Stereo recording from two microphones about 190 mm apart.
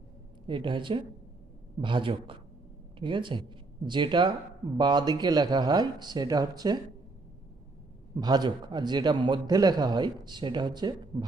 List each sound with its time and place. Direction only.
0.4 s a man's voice: 25° right (ahead or behind)
8.1 s a man's voice: 20° right (ahead or behind)